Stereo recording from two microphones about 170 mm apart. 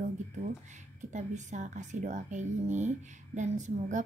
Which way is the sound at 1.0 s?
45° right (ahead or behind).